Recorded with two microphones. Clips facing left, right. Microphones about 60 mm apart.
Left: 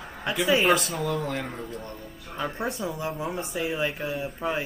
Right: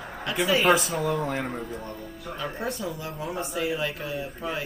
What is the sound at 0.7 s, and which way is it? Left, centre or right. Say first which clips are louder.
Speech: right 2 dB; centre.